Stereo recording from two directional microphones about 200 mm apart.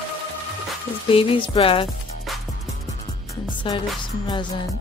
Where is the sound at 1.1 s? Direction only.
25° left (ahead or behind).